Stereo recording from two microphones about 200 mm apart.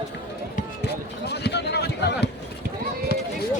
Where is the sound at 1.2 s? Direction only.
55° left (ahead or behind).